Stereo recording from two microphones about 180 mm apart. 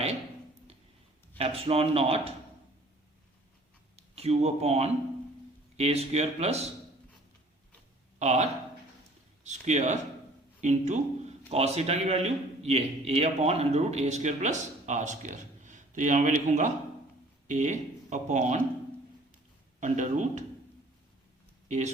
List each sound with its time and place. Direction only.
1.4 s a man's voice: 35° right (ahead or behind)
3.9 s a man's voice: 35° right (ahead or behind)
8.2 s a man's voice: 40° right (ahead or behind)
19.8 s speech: 40° right (ahead or behind)
21.7 s a man's voice: 40° right (ahead or behind)